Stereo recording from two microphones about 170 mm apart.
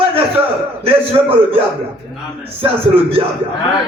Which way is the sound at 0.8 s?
35° right (ahead or behind).